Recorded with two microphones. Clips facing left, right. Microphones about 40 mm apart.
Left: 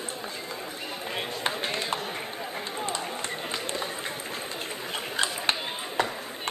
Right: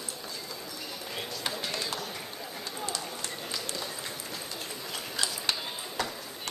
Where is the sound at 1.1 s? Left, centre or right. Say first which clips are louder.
Left 5 dB; left.